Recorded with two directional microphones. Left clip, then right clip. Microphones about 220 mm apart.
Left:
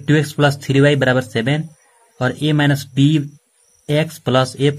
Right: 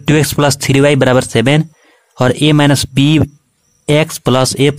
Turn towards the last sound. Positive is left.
turn(degrees=-30)  # may be behind; listen again after turning